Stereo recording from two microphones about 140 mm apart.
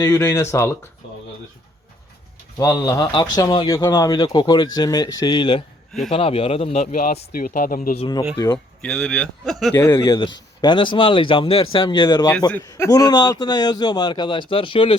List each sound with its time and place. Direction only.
0.0 s speech: 20° left (ahead or behind)
2.6 s speech: 25° left (ahead or behind); by 6.8 s 45° left (ahead or behind)
7.3 s speech: 85° left
7.9 s speech: 35° left (ahead or behind)
8.5 s speech: 5° left (ahead or behind)
9.7 s a man's voice: 15° left (ahead or behind)
10.0 s speech: 35° left (ahead or behind)